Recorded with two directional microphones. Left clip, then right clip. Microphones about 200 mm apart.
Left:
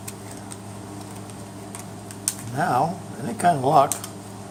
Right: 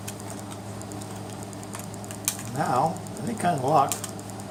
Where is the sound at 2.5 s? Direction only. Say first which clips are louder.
Left 4 dB; 40° left (ahead or behind).